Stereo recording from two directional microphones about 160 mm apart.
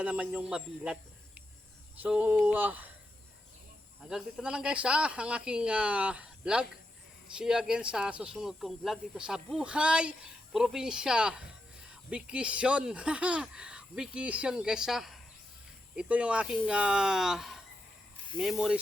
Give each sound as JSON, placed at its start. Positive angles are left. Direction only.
{"t": 0.0, "sound": "speech", "side_deg": -10}
{"t": 2.0, "sound": "speech", "side_deg": -10}
{"t": 4.1, "sound": "speech", "side_deg": -5}